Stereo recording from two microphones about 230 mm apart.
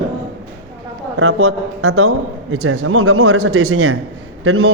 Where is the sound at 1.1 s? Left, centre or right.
Right.